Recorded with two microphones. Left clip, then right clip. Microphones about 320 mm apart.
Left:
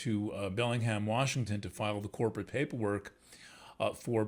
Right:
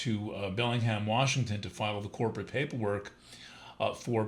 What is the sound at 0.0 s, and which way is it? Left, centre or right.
Speech, left.